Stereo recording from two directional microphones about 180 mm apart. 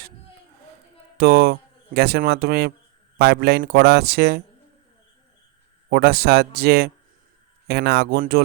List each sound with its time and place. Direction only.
1.2 s speech: 60° right (ahead or behind)
5.9 s speech: 60° right (ahead or behind)